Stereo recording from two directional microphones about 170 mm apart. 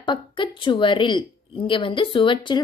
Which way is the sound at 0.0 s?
30° left (ahead or behind).